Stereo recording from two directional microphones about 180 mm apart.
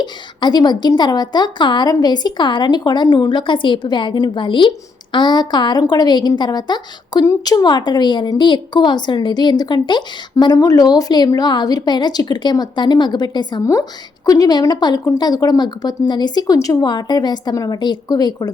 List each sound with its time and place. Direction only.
0.0 s a woman's voice: 25° left (ahead or behind)